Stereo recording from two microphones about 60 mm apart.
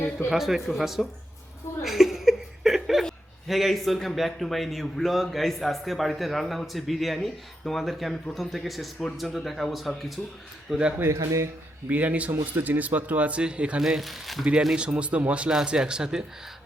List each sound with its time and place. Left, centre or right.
0.3 s a man's voice: centre
1.8 s chuckle: centre
3.4 s a man's voice: centre
11.1 s speech: right
11.9 s a man's voice: right
13.8 s a man's voice: centre